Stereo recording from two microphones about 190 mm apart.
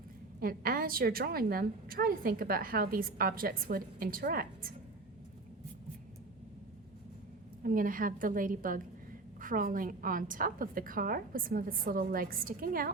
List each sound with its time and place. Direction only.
0.3 s a woman's voice: 50° right (ahead or behind)
7.6 s a woman's voice: 45° right (ahead or behind)